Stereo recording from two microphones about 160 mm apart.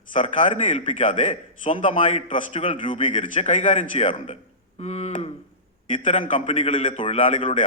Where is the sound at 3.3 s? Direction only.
45° left (ahead or behind).